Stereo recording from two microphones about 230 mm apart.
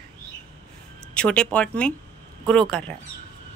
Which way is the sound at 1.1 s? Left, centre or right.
Centre.